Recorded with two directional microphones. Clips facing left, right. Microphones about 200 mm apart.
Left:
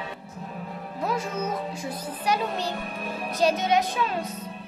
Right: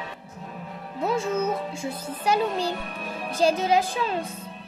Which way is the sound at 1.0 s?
25° right (ahead or behind).